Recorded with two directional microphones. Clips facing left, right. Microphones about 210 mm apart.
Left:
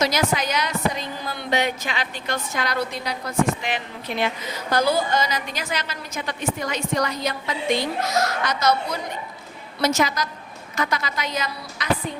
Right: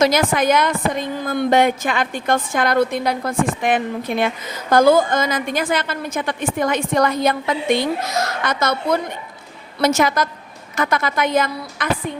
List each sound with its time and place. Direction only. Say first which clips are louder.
0.0 s a woman's voice: right 6 dB; 50° right (ahead or behind)